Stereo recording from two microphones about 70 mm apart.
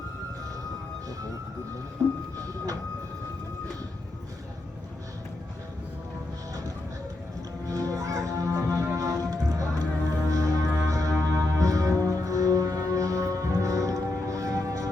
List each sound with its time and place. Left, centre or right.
7.7 s music: right